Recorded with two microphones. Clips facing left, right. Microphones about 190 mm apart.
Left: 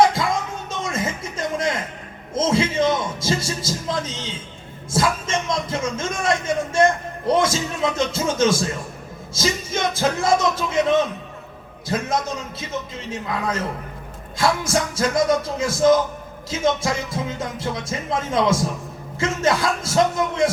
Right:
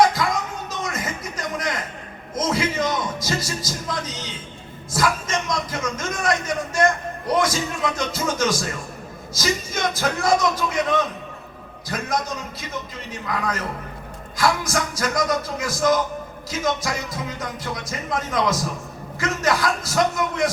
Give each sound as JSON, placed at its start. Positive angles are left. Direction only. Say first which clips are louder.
{"t": 0.7, "sound": "music", "louder": "left 4 dB", "side_deg": 25}
{"t": 2.3, "sound": "a man's voice", "louder": "left 3 dB", "side_deg": 25}